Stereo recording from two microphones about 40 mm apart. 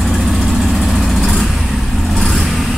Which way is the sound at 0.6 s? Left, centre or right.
Centre.